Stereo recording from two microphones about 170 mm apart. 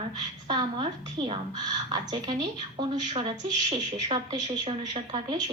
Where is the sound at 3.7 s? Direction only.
25° right (ahead or behind).